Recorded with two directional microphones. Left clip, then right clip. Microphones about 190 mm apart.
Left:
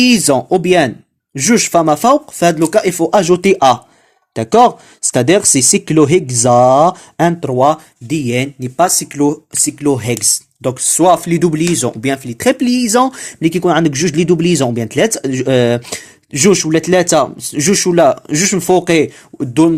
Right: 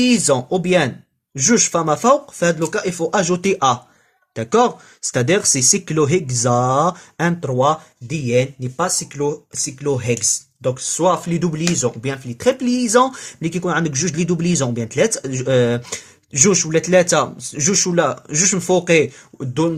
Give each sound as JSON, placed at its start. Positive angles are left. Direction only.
{"t": 0.0, "sound": "speech", "side_deg": 30}
{"t": 8.0, "sound": "speech", "side_deg": 45}